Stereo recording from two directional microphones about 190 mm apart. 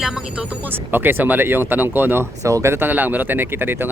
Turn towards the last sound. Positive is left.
turn(degrees=-10)  # may be behind; listen again after turning